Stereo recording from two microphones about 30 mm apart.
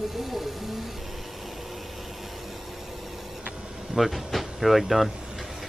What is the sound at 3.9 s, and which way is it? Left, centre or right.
Speech, centre.